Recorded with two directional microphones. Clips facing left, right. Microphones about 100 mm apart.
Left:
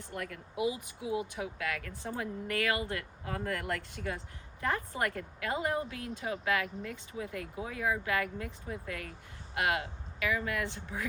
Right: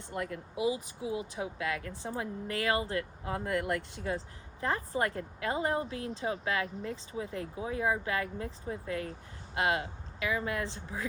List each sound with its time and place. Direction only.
0.0 s speech: 25° right (ahead or behind)